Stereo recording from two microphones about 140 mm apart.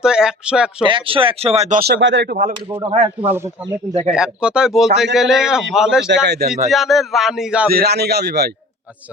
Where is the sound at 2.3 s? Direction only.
90° right.